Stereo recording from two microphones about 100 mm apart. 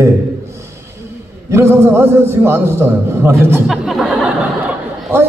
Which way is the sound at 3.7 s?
5° right (ahead or behind).